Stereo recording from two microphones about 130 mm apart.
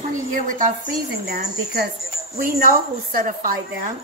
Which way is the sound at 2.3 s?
90° right.